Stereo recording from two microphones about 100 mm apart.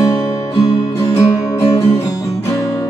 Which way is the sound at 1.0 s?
30° left (ahead or behind).